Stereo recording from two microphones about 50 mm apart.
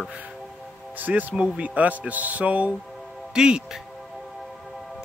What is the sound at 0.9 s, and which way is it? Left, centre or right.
Speech, right.